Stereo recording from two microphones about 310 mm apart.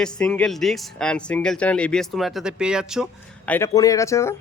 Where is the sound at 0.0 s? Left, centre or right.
Centre.